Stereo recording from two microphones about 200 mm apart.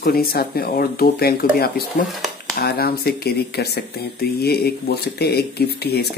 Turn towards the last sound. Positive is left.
turn(degrees=50)  # may be behind; listen again after turning